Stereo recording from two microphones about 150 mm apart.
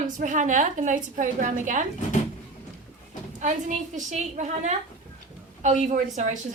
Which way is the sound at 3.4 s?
55° right (ahead or behind).